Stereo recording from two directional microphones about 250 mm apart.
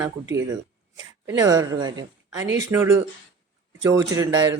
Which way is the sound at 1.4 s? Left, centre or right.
Centre.